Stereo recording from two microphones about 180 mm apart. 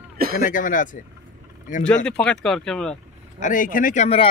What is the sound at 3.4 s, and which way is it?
Speech, 45° left (ahead or behind).